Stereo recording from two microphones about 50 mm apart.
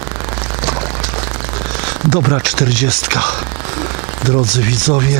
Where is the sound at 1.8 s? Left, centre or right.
Centre.